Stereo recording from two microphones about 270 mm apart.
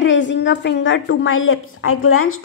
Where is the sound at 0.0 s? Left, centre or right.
Left.